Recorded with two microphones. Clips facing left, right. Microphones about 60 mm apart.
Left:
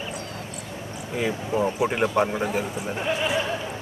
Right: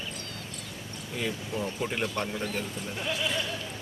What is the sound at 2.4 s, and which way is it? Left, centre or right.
Speech, centre.